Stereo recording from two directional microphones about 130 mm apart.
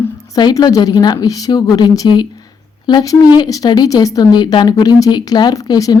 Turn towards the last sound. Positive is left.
turn(degrees=30)  # may be behind; listen again after turning